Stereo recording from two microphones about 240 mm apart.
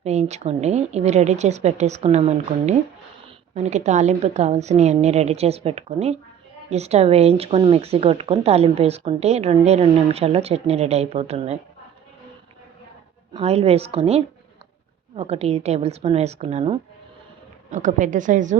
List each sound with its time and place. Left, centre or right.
0.0 s speech: right
13.3 s a woman's voice: right